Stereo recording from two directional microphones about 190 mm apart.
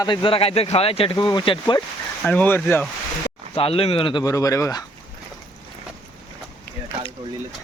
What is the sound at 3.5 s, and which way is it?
Speech, 30° left (ahead or behind).